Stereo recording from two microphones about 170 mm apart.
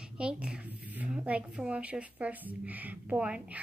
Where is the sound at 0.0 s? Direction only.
5° right (ahead or behind).